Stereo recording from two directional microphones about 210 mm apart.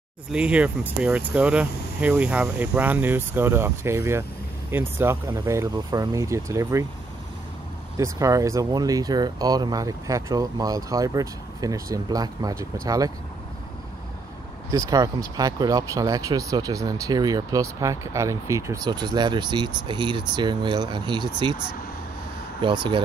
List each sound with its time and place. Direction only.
0.3 s speech: 5° right (ahead or behind)
8.0 s speech: 15° right (ahead or behind)
14.7 s speech: 15° right (ahead or behind)
22.6 s speech: 25° right (ahead or behind)